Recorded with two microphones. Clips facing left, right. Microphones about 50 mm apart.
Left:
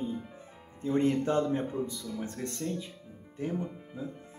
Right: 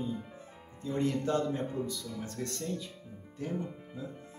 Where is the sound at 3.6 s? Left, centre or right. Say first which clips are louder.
Left 2 dB; centre.